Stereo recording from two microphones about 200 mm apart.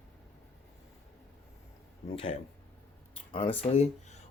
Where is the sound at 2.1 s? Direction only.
30° left (ahead or behind).